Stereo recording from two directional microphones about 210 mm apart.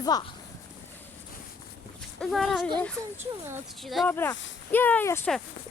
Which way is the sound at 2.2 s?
Centre (ahead or behind).